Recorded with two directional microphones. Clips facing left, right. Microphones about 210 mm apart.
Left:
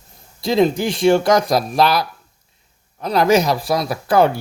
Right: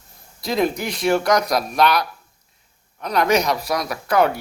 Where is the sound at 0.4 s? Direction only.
25° left (ahead or behind).